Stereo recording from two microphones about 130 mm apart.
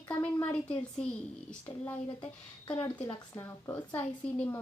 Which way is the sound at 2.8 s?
35° left (ahead or behind).